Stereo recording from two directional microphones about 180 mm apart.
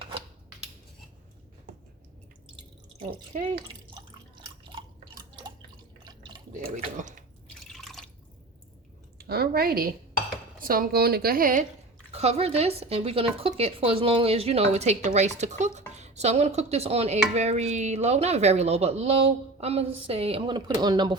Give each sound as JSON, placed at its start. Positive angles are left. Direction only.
{"t": 3.9, "sound": "drip", "side_deg": -25}
{"t": 6.1, "sound": "drip", "side_deg": -25}
{"t": 6.7, "sound": "speech", "side_deg": -40}
{"t": 7.4, "sound": "drip", "side_deg": 0}
{"t": 9.1, "sound": "a woman's voice", "side_deg": -60}
{"t": 12.1, "sound": "speech", "side_deg": -35}